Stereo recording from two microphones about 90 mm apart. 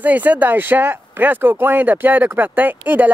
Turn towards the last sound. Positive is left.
turn(degrees=-20)  # may be behind; listen again after turning